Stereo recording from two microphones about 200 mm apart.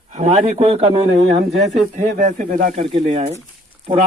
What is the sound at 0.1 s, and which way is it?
A man's voice, 35° right (ahead or behind).